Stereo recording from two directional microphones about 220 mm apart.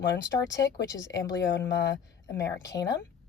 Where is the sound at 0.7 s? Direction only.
15° left (ahead or behind).